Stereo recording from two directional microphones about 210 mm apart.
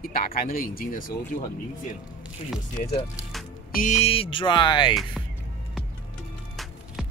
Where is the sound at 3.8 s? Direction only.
30° left (ahead or behind).